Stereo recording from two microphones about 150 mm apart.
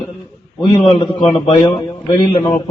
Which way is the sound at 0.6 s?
35° left (ahead or behind).